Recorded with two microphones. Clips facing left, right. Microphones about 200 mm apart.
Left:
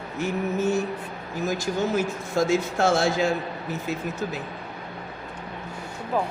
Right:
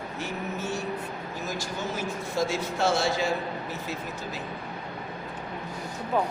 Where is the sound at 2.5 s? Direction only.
50° left (ahead or behind).